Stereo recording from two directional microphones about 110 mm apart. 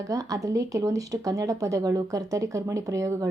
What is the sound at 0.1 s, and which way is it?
A woman's voice, 30° right (ahead or behind).